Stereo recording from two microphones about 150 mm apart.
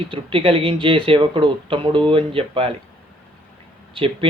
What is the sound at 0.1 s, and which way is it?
Speech, 35° right (ahead or behind).